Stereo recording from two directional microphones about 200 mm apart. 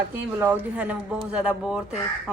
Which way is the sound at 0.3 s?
10° right (ahead or behind).